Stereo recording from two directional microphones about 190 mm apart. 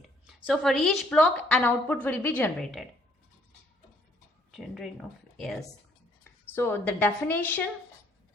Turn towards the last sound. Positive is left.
turn(degrees=10)  # may be behind; listen again after turning